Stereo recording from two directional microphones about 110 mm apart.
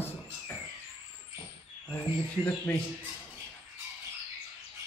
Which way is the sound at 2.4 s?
15° left (ahead or behind).